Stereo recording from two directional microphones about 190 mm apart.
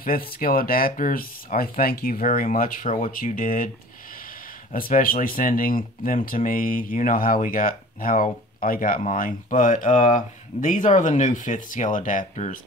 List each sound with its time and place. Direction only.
0.0 s speech: 50° left (ahead or behind)
4.7 s speech: 50° left (ahead or behind)